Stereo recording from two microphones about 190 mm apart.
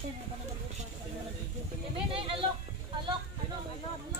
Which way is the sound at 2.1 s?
30° right (ahead or behind).